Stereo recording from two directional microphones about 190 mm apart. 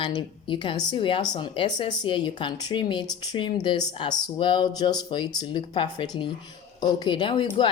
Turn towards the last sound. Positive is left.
turn(degrees=25)  # may be behind; listen again after turning